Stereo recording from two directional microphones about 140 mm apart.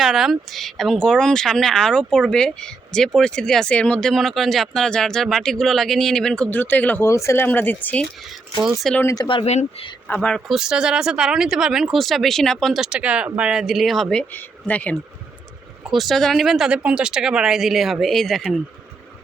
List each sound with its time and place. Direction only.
0.0 s speech: centre (ahead or behind)
8.6 s speech: centre (ahead or behind)
9.0 s speech: 20° left (ahead or behind)
9.2 s speech: 35° left (ahead or behind)
10.2 s speech: centre (ahead or behind)
15.9 s speech: centre (ahead or behind)